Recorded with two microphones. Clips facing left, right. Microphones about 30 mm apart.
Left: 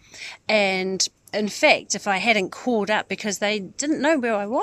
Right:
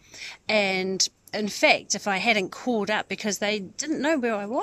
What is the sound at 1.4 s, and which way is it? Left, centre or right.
Speech, centre.